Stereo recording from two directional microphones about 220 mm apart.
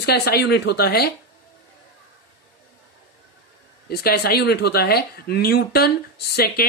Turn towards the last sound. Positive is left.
turn(degrees=45)  # may be behind; listen again after turning